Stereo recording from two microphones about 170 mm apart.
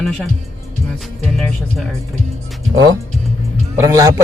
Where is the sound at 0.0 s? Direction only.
5° left (ahead or behind).